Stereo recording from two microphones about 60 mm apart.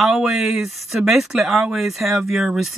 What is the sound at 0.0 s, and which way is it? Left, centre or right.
Speech, centre.